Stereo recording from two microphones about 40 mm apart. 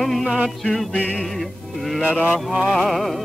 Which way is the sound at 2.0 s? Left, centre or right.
Right.